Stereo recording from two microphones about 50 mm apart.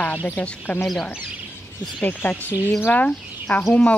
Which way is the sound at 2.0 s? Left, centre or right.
Left.